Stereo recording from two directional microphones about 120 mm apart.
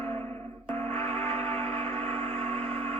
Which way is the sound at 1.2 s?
60° right (ahead or behind).